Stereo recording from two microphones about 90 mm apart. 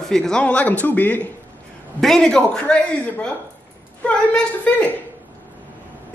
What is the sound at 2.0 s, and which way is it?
Speech, 5° left (ahead or behind).